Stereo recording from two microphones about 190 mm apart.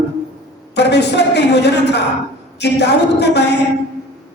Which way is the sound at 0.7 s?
60° left (ahead or behind).